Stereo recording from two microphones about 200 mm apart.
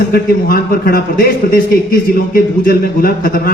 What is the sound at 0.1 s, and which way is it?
A man's voice, 45° left (ahead or behind).